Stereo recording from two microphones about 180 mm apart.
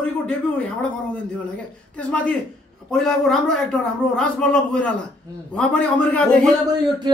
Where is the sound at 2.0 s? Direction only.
5° left (ahead or behind).